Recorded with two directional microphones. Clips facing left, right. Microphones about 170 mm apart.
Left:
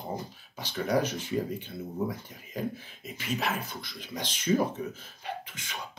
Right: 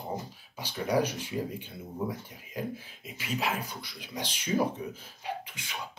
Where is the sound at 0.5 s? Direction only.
10° right (ahead or behind).